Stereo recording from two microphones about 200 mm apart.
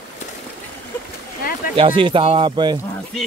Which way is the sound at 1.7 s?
25° right (ahead or behind).